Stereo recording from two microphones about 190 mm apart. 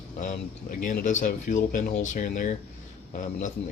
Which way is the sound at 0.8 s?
40° left (ahead or behind).